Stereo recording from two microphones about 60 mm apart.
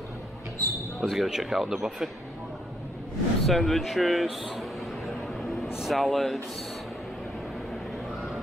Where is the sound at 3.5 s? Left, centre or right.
Centre.